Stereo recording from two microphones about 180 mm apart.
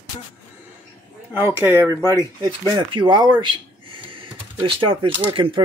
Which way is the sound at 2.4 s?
25° right (ahead or behind).